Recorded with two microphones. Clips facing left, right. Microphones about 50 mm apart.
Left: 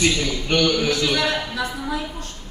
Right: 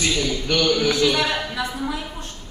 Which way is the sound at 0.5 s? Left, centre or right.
Left.